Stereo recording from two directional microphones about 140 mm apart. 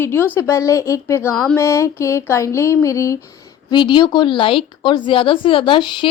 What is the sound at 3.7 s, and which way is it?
A woman's voice, 35° left (ahead or behind).